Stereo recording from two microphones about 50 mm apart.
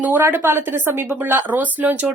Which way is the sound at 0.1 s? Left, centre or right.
Right.